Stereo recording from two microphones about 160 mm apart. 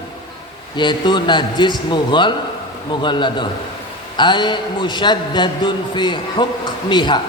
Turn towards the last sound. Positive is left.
turn(degrees=30)  # may be behind; listen again after turning